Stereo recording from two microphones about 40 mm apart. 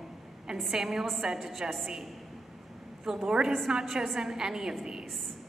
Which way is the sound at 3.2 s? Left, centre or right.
Centre.